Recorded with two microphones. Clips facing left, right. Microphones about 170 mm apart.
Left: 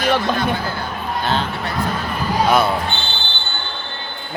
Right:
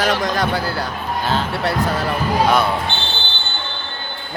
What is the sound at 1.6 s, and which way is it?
Speech, 80° right.